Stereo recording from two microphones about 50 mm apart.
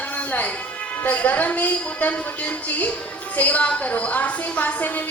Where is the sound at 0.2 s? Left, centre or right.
Left.